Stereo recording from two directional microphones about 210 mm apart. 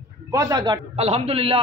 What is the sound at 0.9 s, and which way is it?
Speech, 30° right (ahead or behind).